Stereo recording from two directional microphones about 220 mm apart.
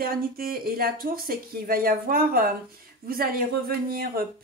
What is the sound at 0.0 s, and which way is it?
Speech, 40° right (ahead or behind).